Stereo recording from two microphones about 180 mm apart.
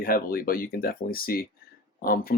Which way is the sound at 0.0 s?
55° left (ahead or behind).